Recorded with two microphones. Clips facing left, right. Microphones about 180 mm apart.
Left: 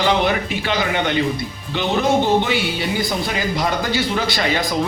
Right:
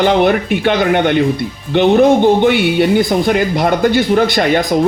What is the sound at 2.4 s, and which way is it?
Speech, 60° right (ahead or behind).